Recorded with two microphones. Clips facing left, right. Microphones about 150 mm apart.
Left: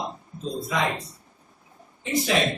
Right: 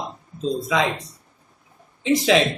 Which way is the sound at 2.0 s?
90° right.